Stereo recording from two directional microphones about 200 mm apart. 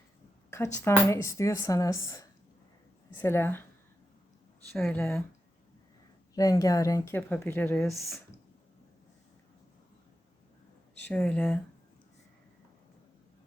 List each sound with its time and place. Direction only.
0.5 s a woman's voice: 15° left (ahead or behind)
4.8 s speech: 5° left (ahead or behind)
6.3 s a woman's voice: 15° left (ahead or behind); by 8.2 s centre (ahead or behind)
11.0 s speech: 5° left (ahead or behind)